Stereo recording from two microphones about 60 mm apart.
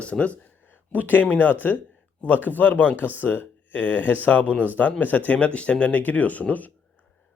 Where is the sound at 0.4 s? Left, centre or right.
Left.